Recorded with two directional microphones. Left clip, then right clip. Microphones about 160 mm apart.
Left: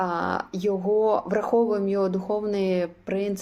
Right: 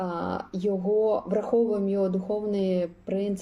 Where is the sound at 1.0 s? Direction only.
30° left (ahead or behind).